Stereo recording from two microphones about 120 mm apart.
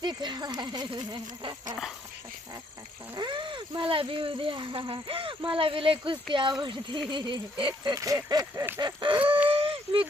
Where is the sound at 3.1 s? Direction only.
40° right (ahead or behind).